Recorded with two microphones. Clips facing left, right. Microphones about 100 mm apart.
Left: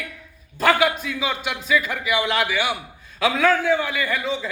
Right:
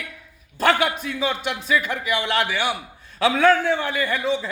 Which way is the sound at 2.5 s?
40° right (ahead or behind).